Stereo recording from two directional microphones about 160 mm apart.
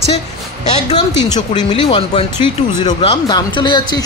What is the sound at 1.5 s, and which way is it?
Speech, 30° left (ahead or behind).